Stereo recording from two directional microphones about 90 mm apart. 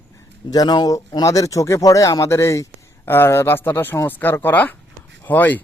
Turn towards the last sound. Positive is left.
turn(degrees=20)  # may be behind; listen again after turning